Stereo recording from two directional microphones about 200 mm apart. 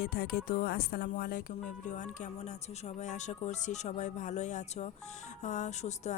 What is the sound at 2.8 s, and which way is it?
Music, 35° left (ahead or behind).